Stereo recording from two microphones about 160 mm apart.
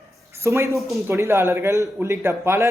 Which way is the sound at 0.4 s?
20° right (ahead or behind).